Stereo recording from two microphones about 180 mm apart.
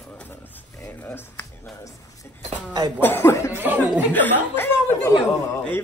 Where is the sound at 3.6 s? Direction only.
10° right (ahead or behind).